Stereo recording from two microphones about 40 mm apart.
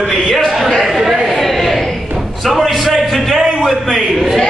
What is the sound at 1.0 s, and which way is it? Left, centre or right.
Chatter, centre.